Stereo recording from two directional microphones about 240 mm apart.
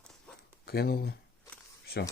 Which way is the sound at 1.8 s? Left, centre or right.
Left.